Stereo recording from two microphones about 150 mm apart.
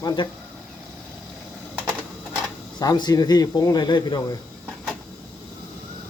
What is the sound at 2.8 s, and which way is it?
Speech, 25° left (ahead or behind).